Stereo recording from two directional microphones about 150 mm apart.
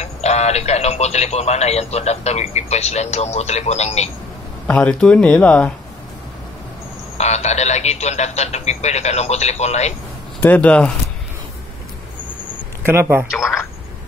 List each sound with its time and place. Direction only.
0.0 s speech: 45° left (ahead or behind)
4.6 s speech: 10° left (ahead or behind)
7.2 s speech: 50° left (ahead or behind)
10.4 s speech: 10° left (ahead or behind)
12.8 s speech: 15° right (ahead or behind)